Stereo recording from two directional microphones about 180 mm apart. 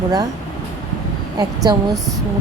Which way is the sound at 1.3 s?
20° right (ahead or behind).